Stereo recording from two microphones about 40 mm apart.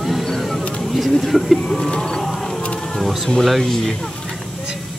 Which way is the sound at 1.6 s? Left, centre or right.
Left.